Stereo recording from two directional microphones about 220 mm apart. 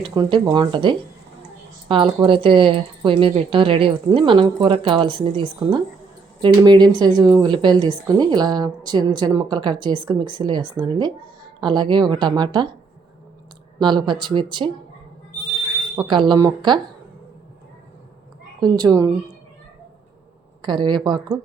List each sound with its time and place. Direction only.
0.0 s a woman's voice: 20° right (ahead or behind)
13.7 s a woman's voice: 20° right (ahead or behind)
16.0 s a woman's voice: 20° right (ahead or behind)
18.6 s a woman's voice: 15° right (ahead or behind)
20.6 s a woman's voice: 20° right (ahead or behind)